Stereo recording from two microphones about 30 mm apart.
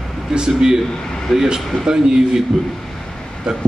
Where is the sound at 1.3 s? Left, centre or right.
Centre.